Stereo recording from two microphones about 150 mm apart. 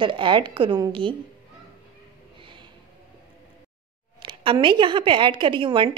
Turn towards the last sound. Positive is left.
turn(degrees=-35)  # may be behind; listen again after turning